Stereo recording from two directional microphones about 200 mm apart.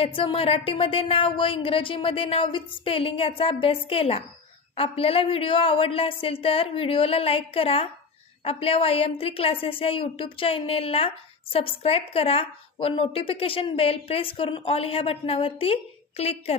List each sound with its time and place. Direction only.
0.0 s a woman's voice: 25° left (ahead or behind)